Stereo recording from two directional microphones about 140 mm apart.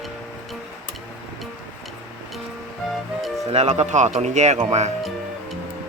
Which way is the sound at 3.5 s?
50° right (ahead or behind).